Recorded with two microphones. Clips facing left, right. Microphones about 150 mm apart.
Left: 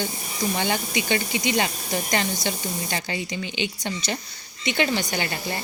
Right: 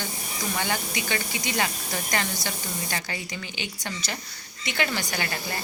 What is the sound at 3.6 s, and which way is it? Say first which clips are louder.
A woman's voice: left 6 dB; 20° left (ahead or behind).